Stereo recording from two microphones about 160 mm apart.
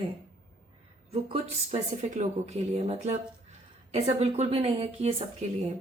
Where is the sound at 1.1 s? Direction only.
40° right (ahead or behind).